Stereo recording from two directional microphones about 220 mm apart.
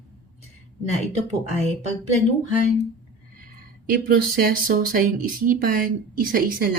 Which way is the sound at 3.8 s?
40° right (ahead or behind).